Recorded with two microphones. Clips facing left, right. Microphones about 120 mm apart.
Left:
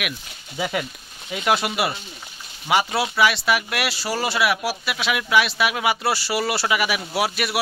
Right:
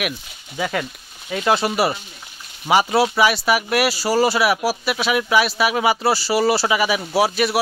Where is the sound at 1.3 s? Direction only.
5° left (ahead or behind).